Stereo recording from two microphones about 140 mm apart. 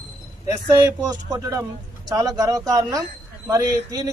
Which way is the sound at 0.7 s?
25° right (ahead or behind).